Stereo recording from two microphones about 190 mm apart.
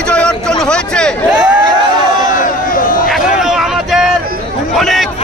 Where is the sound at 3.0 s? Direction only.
Centre (ahead or behind).